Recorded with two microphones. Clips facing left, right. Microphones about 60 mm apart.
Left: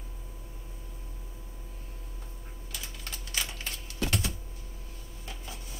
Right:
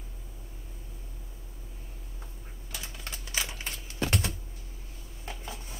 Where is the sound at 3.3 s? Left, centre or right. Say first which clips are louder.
Right 1 dB; centre.